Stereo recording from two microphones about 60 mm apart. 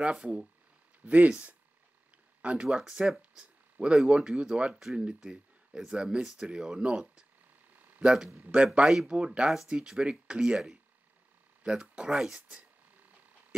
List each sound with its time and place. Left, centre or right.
0.0 s speech: centre